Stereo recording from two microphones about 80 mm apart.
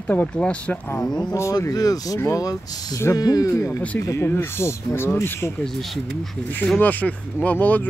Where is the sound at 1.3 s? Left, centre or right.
Left.